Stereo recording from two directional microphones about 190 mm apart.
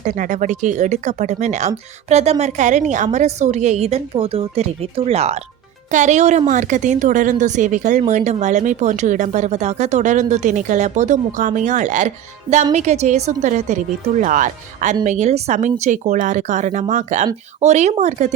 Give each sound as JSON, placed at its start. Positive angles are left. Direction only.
{"t": 0.0, "sound": "a woman's voice", "side_deg": -40}